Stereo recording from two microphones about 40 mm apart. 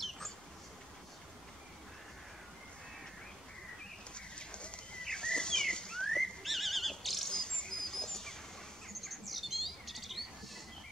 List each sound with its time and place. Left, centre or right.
4.1 s bird: left
5.0 s horse: centre
7.3 s bird: left
7.8 s dog: centre
8.8 s a sound: centre